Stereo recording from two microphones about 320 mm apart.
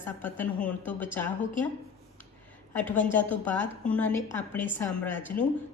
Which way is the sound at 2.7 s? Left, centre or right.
Centre.